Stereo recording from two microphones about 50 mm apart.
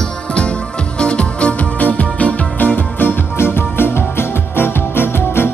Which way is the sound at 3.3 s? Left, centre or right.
Left.